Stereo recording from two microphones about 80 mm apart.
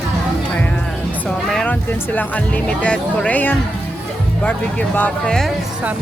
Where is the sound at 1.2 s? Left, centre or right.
Centre.